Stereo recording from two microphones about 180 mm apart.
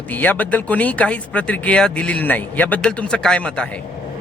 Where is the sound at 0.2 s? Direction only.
10° left (ahead or behind).